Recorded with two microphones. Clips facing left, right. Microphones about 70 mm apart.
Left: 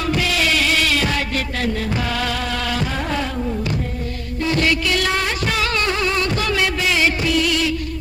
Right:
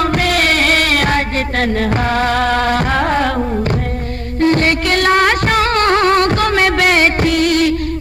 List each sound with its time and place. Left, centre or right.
0.0 s music: right
4.4 s music: right